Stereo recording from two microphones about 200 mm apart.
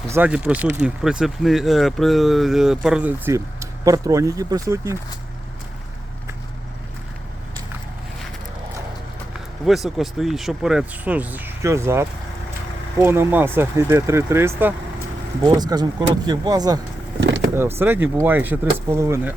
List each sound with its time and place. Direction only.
0.1 s speech: 5° right (ahead or behind)
9.6 s speech: centre (ahead or behind); by 16.8 s 20° right (ahead or behind)
17.2 s vehicle: 60° right (ahead or behind)
17.7 s speech: 10° right (ahead or behind)